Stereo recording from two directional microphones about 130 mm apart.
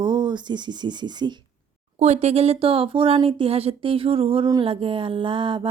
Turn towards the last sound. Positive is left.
turn(degrees=-40)  # may be behind; listen again after turning